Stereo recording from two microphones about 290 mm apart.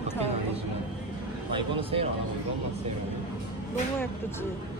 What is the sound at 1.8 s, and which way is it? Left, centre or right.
Speech, centre.